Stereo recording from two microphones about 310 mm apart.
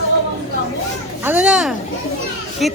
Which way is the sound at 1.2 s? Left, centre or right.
Centre.